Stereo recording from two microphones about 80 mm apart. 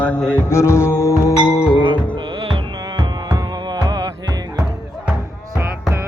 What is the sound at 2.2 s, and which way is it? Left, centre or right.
Music, right.